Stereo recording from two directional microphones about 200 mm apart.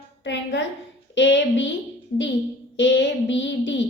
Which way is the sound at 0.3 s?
60° left (ahead or behind).